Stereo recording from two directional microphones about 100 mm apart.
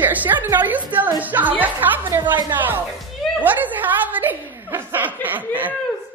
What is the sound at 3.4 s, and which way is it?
Chuckle, 15° right (ahead or behind).